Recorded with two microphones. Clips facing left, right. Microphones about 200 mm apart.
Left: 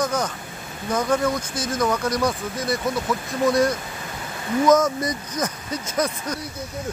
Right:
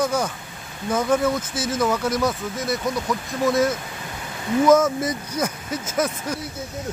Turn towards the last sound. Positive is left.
turn(degrees=-5)  # may be behind; listen again after turning